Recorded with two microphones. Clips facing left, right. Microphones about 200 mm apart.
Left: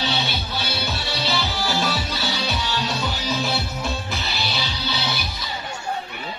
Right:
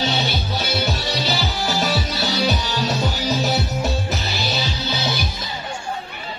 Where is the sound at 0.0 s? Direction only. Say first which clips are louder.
Right 3 dB; 40° right (ahead or behind).